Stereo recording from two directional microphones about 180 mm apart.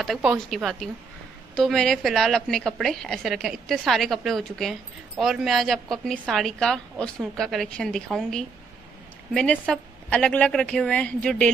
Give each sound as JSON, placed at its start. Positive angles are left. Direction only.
{"t": 0.0, "sound": "a woman's voice", "side_deg": 0}